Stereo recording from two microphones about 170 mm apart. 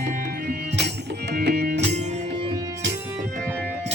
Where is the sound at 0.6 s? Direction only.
85° right; by 1.8 s 60° right (ahead or behind).